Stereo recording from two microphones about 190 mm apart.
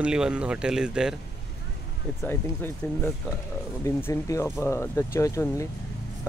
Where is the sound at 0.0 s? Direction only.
5° right (ahead or behind).